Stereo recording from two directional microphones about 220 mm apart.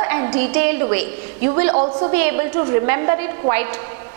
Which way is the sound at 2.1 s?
10° right (ahead or behind).